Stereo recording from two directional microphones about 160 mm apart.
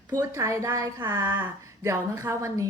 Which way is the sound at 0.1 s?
20° right (ahead or behind).